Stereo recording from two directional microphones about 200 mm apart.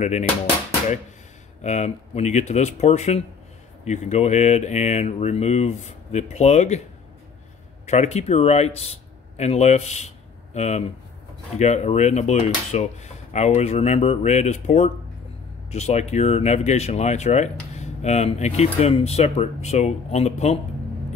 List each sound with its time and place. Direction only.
0.0 s speech: 35° left (ahead or behind)
1.6 s speech: 35° left (ahead or behind)
7.8 s speech: 35° left (ahead or behind)